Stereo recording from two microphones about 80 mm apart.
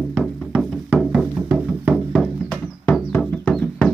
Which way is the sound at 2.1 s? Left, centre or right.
Centre.